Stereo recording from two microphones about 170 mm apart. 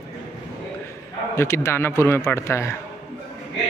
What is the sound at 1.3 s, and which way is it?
Speech, 15° left (ahead or behind).